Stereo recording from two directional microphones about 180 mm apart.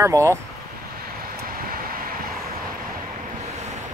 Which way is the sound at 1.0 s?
55° right (ahead or behind).